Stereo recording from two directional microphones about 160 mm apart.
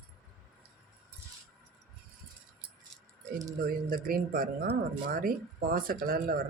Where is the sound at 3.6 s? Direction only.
65° right (ahead or behind).